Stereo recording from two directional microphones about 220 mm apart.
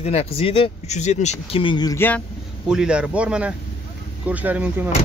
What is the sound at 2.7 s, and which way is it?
Speech, 5° right (ahead or behind).